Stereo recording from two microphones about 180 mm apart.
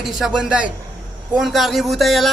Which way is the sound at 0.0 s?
5° right (ahead or behind).